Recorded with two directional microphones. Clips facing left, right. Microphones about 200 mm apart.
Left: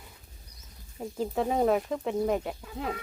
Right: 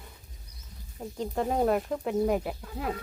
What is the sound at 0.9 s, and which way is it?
Speech, 5° left (ahead or behind).